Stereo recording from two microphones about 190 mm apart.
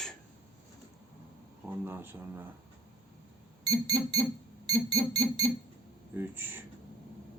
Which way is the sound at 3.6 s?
20° right (ahead or behind).